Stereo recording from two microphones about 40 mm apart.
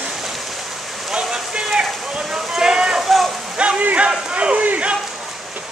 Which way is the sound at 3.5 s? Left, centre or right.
Right.